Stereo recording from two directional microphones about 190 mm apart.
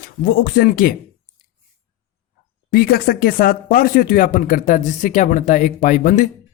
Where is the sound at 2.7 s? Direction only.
50° left (ahead or behind).